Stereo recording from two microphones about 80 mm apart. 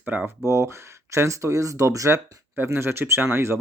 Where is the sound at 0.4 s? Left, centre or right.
Right.